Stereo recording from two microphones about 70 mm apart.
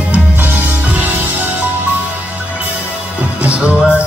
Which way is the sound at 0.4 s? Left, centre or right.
Right.